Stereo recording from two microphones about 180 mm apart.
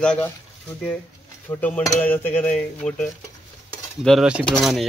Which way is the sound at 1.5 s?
10° left (ahead or behind).